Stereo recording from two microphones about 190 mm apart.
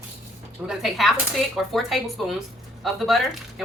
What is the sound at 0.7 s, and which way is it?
A woman's voice, centre (ahead or behind).